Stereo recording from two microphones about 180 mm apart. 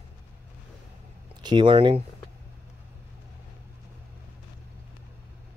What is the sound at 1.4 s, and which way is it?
Speech, 25° right (ahead or behind).